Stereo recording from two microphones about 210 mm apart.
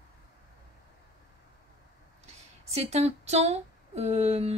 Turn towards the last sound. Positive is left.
turn(degrees=-30)  # may be behind; listen again after turning